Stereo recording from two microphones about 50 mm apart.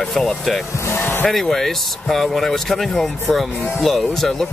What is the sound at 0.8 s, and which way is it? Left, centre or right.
Vehicle, left.